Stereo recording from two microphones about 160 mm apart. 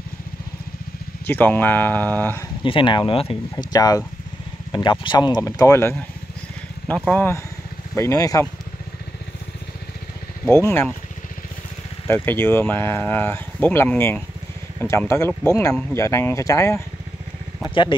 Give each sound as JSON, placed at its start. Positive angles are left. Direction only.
{"t": 1.2, "sound": "speech", "side_deg": 10}
{"t": 2.6, "sound": "speech", "side_deg": 30}
{"t": 3.7, "sound": "speech", "side_deg": 25}
{"t": 5.0, "sound": "speech", "side_deg": 30}
{"t": 7.1, "sound": "speech", "side_deg": 15}
{"t": 10.4, "sound": "speech", "side_deg": 15}
{"t": 12.1, "sound": "speech", "side_deg": 15}
{"t": 17.6, "sound": "speech", "side_deg": 30}